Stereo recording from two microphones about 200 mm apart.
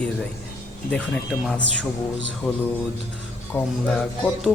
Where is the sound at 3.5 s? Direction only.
Centre (ahead or behind).